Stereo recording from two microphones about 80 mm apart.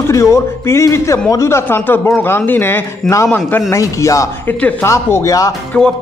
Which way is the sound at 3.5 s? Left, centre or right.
Left.